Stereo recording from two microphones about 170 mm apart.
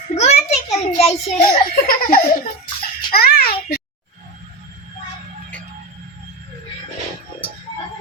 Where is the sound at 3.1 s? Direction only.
65° left (ahead or behind).